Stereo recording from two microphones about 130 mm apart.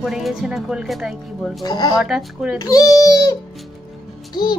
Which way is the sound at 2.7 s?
25° left (ahead or behind).